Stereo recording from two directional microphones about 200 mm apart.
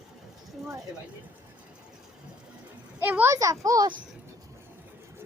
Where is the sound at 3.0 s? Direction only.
10° right (ahead or behind).